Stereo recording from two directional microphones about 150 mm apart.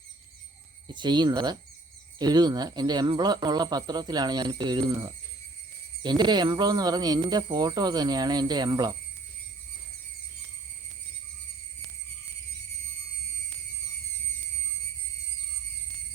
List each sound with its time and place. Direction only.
0.9 s speech: 30° right (ahead or behind)